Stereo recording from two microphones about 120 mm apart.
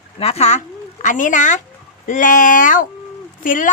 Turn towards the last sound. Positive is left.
turn(degrees=90)